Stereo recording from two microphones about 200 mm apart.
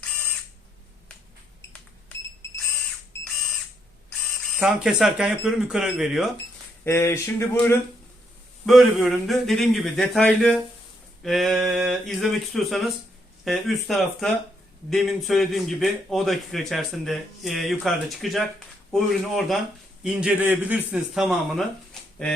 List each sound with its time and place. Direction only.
4.5 s a man's voice: 5° right (ahead or behind)
6.8 s speech: 15° left (ahead or behind)
8.6 s a man's voice: centre (ahead or behind)